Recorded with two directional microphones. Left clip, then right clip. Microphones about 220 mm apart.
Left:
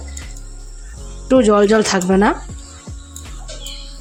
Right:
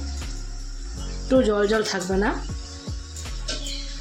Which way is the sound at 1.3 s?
35° left (ahead or behind).